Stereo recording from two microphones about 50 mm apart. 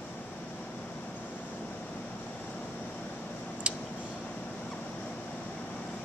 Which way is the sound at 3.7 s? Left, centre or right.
Right.